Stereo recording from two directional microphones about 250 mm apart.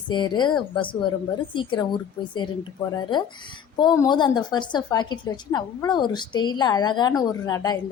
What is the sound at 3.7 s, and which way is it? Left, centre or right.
A woman's voice, centre.